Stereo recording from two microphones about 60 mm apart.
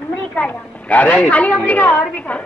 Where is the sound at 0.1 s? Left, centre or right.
Left.